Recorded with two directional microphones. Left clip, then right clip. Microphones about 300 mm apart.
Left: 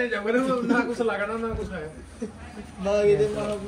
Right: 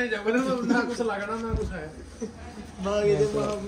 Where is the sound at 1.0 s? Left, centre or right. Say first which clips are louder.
Left 3 dB; left.